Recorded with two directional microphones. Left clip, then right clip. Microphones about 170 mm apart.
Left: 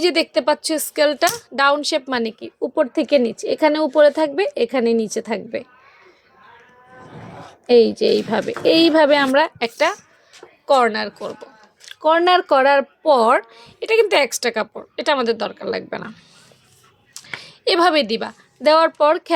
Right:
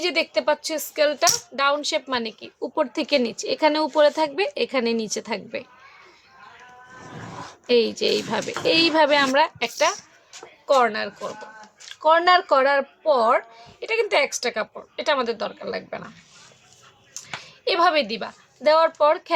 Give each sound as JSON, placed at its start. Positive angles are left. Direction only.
{"t": 0.0, "sound": "speech", "side_deg": 45}
{"t": 2.6, "sound": "speech", "side_deg": 20}
{"t": 7.7, "sound": "speech", "side_deg": 20}
{"t": 17.2, "sound": "speech", "side_deg": 45}